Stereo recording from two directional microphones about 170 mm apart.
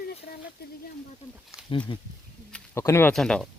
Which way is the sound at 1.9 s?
30° left (ahead or behind).